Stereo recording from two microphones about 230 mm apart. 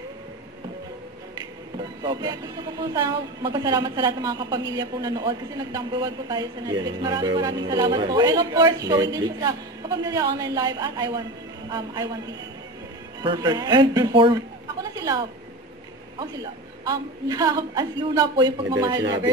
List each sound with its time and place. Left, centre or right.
2.0 s a woman's voice: centre
13.2 s a man's voice: centre